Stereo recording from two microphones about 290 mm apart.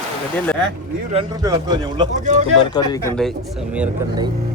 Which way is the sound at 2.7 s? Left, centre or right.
Centre.